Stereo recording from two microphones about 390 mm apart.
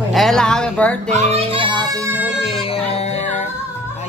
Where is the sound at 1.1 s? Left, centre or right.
Centre.